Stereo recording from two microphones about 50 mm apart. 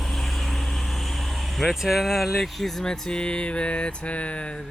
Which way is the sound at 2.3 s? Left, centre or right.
Centre.